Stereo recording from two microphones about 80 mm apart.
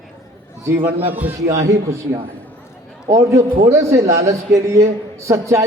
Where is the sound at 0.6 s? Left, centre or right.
Right.